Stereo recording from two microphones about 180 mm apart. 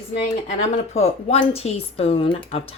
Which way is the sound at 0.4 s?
40° left (ahead or behind).